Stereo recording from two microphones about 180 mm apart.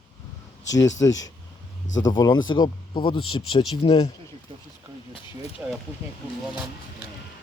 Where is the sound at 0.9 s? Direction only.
20° left (ahead or behind).